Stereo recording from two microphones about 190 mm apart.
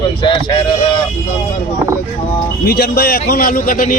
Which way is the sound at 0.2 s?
25° left (ahead or behind).